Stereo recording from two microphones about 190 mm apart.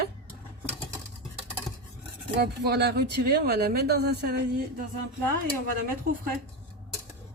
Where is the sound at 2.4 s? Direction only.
60° right (ahead or behind).